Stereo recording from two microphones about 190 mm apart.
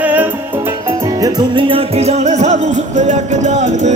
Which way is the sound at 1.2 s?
20° right (ahead or behind).